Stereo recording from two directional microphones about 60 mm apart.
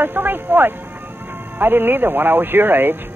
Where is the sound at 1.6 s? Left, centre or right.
Right.